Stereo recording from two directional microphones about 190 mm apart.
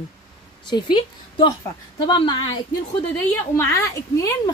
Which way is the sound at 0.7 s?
25° left (ahead or behind).